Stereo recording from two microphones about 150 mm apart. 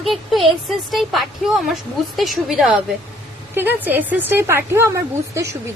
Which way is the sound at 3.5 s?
15° right (ahead or behind).